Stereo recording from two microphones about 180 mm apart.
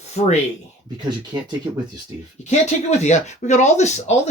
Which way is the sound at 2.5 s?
40° left (ahead or behind).